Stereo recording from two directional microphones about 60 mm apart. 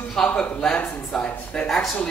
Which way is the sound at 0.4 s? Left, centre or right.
Centre.